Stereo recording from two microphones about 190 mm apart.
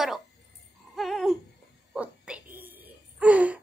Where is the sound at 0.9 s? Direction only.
Centre (ahead or behind).